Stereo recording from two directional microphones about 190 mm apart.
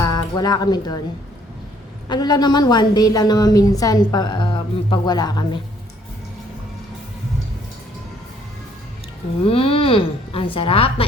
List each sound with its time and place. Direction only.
0.0 s speech: 20° left (ahead or behind)
2.0 s a woman's voice: 20° left (ahead or behind)
9.4 s a woman's voice: 30° left (ahead or behind)